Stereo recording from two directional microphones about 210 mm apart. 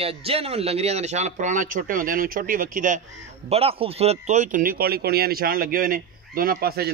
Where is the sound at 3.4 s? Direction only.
30° right (ahead or behind); by 6.9 s 45° right (ahead or behind).